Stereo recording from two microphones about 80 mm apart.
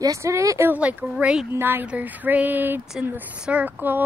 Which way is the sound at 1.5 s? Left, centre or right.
Right.